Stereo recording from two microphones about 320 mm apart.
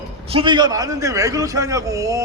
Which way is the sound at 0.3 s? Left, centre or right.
Centre.